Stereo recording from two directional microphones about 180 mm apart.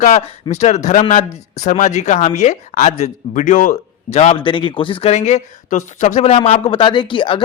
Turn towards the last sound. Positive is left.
turn(degrees=30)  # may be behind; listen again after turning